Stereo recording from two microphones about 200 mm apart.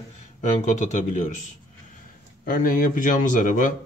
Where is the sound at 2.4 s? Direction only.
45° left (ahead or behind).